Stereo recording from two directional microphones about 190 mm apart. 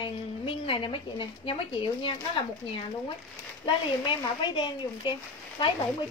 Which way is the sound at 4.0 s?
25° left (ahead or behind).